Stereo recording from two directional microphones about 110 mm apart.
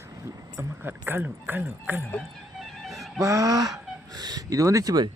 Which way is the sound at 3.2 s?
30° right (ahead or behind).